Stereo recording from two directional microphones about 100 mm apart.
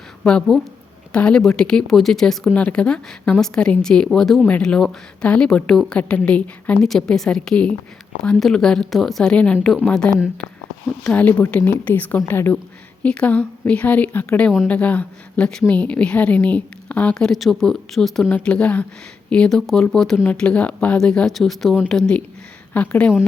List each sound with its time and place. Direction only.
0.3 s a woman's voice: 5° left (ahead or behind)